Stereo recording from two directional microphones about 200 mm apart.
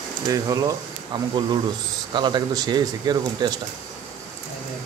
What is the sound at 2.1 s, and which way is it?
Speech, 20° right (ahead or behind).